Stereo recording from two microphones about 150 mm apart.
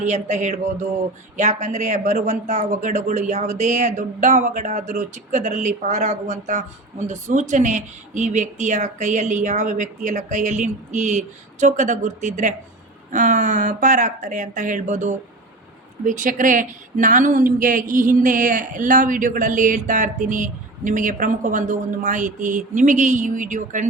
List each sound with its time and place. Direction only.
0.0 s speech: 55° right (ahead or behind)